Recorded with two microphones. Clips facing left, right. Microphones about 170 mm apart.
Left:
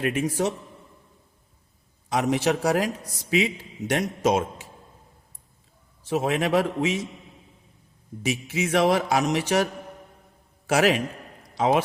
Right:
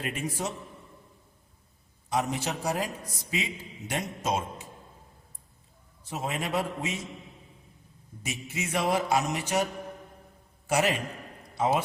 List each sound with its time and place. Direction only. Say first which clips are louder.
0.0 s a man's voice: left 8 dB; 75° left (ahead or behind)
2.0 s a man's voice: left 7 dB; 85° left
6.1 s a man's voice: left 9 dB; 85° left
8.2 s speech: left 9 dB; 90° left
10.7 s a man's voice: left 6 dB; 90° left